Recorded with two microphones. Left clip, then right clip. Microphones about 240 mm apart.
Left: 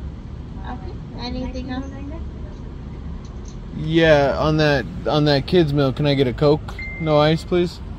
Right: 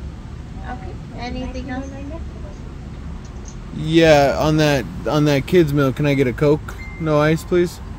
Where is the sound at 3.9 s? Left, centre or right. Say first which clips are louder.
Right 2 dB; right.